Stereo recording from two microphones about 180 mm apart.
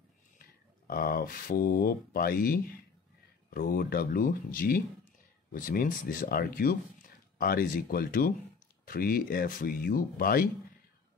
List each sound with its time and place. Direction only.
0.8 s speech: 55° left (ahead or behind)